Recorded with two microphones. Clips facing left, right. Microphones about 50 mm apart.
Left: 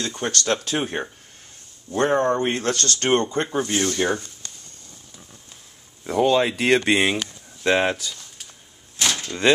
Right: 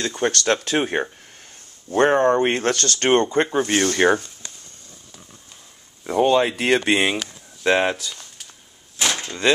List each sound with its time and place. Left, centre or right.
0.0 s speech: right
3.6 s speech: right
6.0 s speech: centre
8.9 s a sound: centre